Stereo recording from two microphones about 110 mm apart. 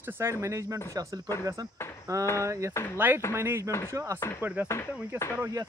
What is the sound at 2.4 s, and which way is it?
Speech, 25° right (ahead or behind).